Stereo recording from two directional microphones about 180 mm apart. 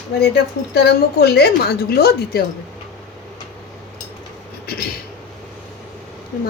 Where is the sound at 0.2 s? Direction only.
60° left (ahead or behind).